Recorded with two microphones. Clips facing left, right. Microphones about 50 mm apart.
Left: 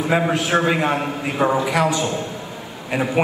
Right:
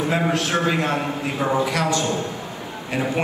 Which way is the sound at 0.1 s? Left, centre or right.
Centre.